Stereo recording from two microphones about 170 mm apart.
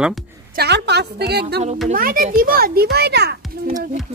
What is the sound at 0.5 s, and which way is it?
A woman's voice, 75° right (ahead or behind).